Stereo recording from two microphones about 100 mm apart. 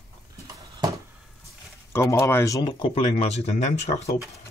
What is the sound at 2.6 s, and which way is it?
Speech, 60° left (ahead or behind).